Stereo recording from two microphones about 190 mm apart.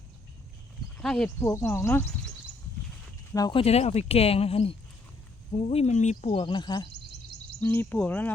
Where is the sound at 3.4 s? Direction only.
20° left (ahead or behind).